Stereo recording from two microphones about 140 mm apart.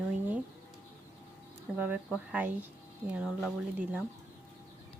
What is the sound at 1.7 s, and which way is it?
Speech, 10° right (ahead or behind).